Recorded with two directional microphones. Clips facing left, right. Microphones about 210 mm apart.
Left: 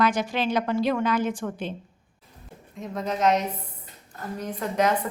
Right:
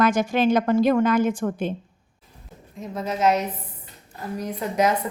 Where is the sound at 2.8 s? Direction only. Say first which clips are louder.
Right 2 dB; 5° right (ahead or behind).